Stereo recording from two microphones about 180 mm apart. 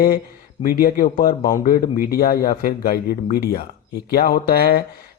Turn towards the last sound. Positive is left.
turn(degrees=60)  # may be behind; listen again after turning